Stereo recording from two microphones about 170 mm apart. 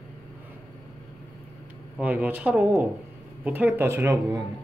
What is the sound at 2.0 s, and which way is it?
Speech, 10° right (ahead or behind).